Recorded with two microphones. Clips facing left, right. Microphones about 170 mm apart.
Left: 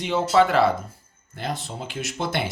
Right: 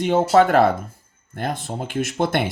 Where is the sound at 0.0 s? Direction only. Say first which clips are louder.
Right 4 dB; 45° right (ahead or behind).